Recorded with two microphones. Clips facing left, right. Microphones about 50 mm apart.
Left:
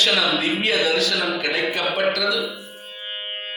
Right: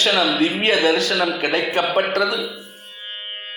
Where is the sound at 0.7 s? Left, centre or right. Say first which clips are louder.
Right 2 dB; right.